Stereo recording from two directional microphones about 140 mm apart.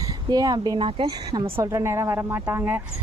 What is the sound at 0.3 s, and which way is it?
A woman's voice, 30° right (ahead or behind).